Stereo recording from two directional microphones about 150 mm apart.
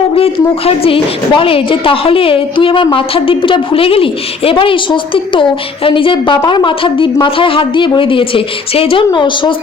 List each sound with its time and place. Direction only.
0.6 s a woman's voice: 40° left (ahead or behind)